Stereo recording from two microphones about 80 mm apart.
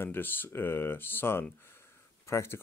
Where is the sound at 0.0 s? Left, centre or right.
Left.